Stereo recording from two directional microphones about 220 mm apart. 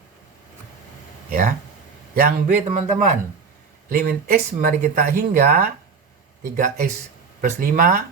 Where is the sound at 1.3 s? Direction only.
40° right (ahead or behind).